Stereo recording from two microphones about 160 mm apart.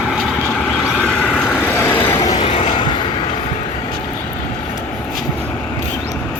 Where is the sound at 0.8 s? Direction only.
5° left (ahead or behind).